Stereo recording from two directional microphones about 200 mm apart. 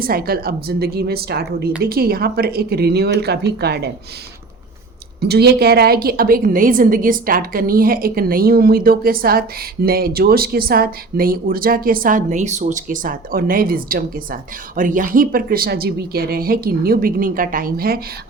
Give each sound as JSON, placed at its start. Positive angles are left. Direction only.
{"t": 0.0, "sound": "a woman's voice", "side_deg": -50}
{"t": 5.2, "sound": "a woman's voice", "side_deg": -55}